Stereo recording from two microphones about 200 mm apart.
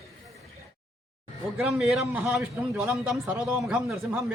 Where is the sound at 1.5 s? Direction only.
Centre (ahead or behind).